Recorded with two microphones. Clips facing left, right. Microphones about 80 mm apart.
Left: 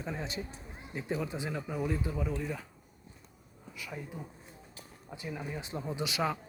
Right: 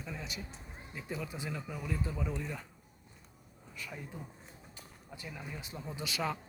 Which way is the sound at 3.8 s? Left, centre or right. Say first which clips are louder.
Left 3 dB; centre.